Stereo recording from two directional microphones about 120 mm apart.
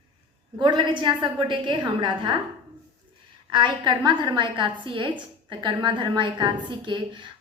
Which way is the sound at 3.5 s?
40° right (ahead or behind).